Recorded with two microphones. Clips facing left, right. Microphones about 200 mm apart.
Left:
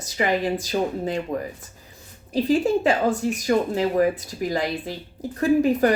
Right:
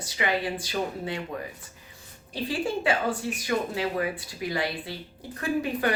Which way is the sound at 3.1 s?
40° left (ahead or behind).